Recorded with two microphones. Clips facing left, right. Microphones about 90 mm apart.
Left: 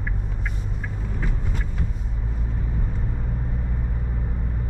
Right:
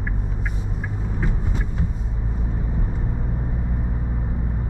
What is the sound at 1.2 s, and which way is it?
Vehicle, 20° right (ahead or behind).